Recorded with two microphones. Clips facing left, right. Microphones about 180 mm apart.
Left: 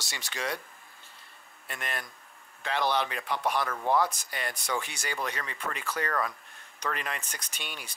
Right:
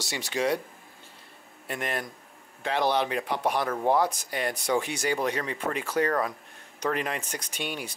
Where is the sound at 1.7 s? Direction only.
10° right (ahead or behind).